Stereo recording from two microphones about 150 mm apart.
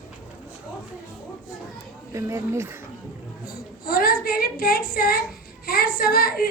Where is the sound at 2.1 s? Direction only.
20° right (ahead or behind).